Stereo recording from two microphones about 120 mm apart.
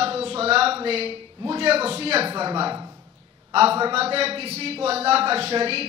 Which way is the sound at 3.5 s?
55° right (ahead or behind).